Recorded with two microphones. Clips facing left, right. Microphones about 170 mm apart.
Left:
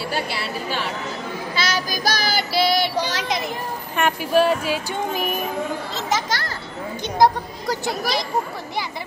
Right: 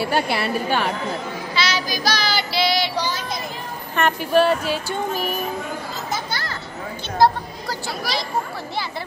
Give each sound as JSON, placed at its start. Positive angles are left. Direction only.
{"t": 0.1, "sound": "a woman's voice", "side_deg": -60}
{"t": 1.5, "sound": "child singing", "side_deg": 50}
{"t": 3.1, "sound": "a sound", "side_deg": 90}
{"t": 3.9, "sound": "speech", "side_deg": 10}
{"t": 6.0, "sound": "children playing", "side_deg": 90}
{"t": 7.2, "sound": "speech", "side_deg": 20}